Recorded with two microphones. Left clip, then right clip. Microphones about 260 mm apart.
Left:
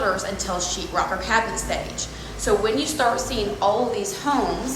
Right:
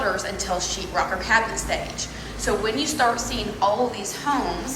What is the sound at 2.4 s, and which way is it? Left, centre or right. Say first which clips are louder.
A woman's voice: left 3 dB; centre.